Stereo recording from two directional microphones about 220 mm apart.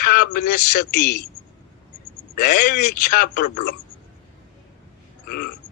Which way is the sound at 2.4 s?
40° left (ahead or behind).